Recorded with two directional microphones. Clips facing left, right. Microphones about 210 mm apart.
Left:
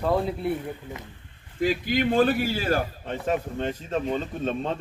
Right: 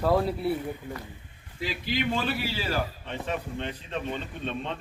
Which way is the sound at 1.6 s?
50° left (ahead or behind).